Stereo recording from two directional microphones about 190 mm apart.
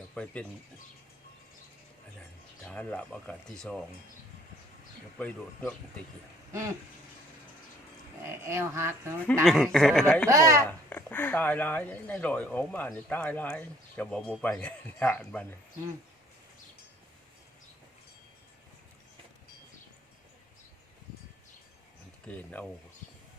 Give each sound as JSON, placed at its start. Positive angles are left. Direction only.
{"t": 0.1, "sound": "speech", "side_deg": 5}
{"t": 2.6, "sound": "speech", "side_deg": 5}
{"t": 5.1, "sound": "speech", "side_deg": 10}
{"t": 8.2, "sound": "speech", "side_deg": -15}
{"t": 9.4, "sound": "speech", "side_deg": 0}
{"t": 10.2, "sound": "speech", "side_deg": -15}
{"t": 10.8, "sound": "speech", "side_deg": 10}
{"t": 22.3, "sound": "speech", "side_deg": 10}